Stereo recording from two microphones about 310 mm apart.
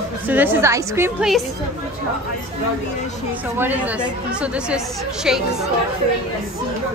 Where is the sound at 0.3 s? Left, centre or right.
Centre.